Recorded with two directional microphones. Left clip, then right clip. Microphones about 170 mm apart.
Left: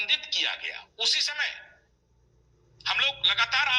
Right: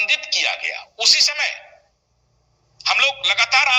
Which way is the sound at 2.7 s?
20° right (ahead or behind).